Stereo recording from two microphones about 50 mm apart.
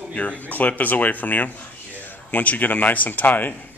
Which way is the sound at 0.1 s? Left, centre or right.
Left.